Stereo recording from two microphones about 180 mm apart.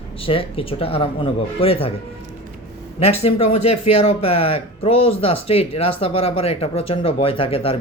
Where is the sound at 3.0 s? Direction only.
35° left (ahead or behind).